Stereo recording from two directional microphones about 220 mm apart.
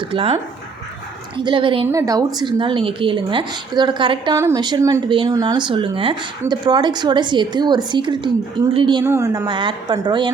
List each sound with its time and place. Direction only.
0.0 s a woman's voice: 25° right (ahead or behind)
1.5 s a woman's voice: 25° right (ahead or behind)